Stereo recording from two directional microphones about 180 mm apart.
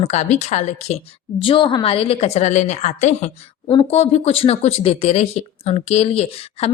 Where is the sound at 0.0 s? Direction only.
40° left (ahead or behind).